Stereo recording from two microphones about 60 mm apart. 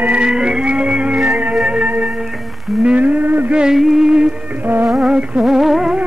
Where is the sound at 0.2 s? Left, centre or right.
Centre.